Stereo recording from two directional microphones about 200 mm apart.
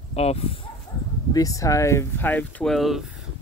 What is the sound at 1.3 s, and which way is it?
Speech, 15° left (ahead or behind).